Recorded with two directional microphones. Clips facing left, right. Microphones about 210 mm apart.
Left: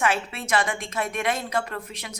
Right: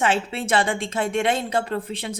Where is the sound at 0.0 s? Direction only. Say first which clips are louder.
Right 3 dB; 30° right (ahead or behind).